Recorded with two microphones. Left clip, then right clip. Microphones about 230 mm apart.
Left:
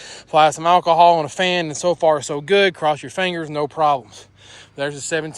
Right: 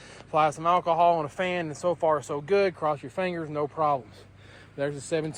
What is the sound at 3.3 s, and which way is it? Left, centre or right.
Speech, left.